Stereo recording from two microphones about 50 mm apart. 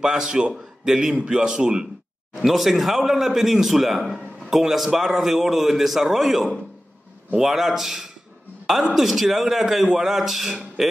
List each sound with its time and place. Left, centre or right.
0.0 s a man's voice: centre
1.1 s a man's voice: centre
2.3 s a man's voice: centre